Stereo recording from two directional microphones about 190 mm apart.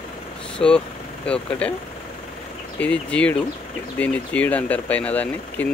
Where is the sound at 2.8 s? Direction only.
5° left (ahead or behind).